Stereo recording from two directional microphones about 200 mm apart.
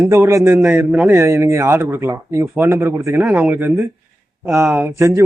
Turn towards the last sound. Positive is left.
turn(degrees=-15)  # may be behind; listen again after turning